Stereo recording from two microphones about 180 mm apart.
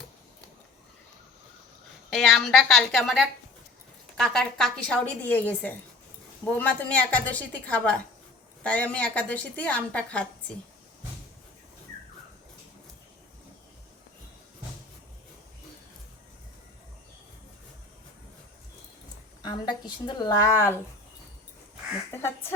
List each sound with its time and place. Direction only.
2.0 s a woman's voice: centre (ahead or behind)
4.2 s a woman's voice: centre (ahead or behind)
19.4 s a woman's voice: 25° left (ahead or behind)
22.1 s a woman's voice: 15° left (ahead or behind)